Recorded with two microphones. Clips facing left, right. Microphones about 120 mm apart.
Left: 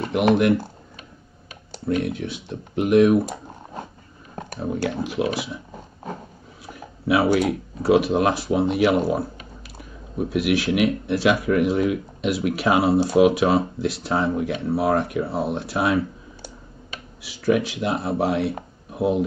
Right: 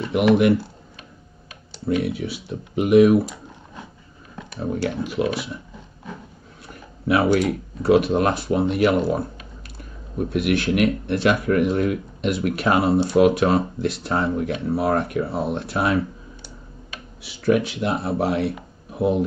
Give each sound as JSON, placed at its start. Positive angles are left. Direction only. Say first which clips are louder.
{"t": 1.9, "sound": "speech", "louder": "right 1 dB", "side_deg": -5}
{"t": 3.3, "sound": "a sound", "louder": "left 4 dB", "side_deg": 45}
{"t": 4.8, "sound": "speech", "louder": "even", "side_deg": 0}
{"t": 6.6, "sound": "speech", "louder": "even", "side_deg": 0}
{"t": 17.2, "sound": "speech", "louder": "right 1 dB", "side_deg": 0}